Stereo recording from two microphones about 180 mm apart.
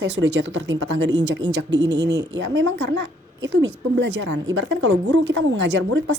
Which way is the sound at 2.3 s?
85° right.